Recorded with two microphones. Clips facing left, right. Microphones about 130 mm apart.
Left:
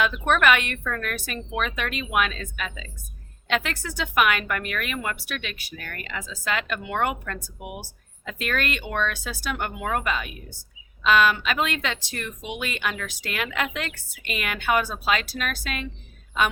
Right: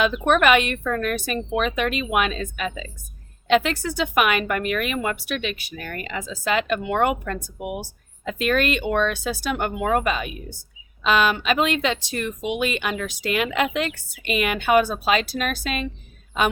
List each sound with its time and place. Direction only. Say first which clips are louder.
0.0 s speech: right 3 dB; 20° right (ahead or behind)